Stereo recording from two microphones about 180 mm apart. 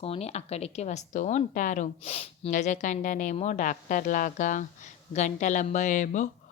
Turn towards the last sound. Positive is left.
turn(degrees=45)  # may be behind; listen again after turning